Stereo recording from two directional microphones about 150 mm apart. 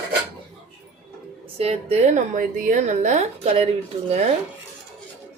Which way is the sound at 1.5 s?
45° right (ahead or behind).